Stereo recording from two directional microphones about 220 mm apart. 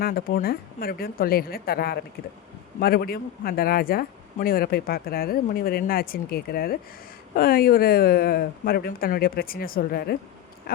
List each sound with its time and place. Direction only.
0.0 s speech: 40° left (ahead or behind)